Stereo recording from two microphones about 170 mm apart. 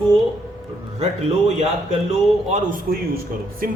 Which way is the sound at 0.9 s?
40° right (ahead or behind).